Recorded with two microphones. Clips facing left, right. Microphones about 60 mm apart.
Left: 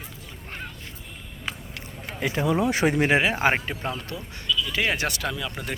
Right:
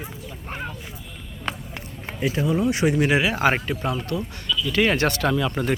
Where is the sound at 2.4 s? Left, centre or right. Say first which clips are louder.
Even; left.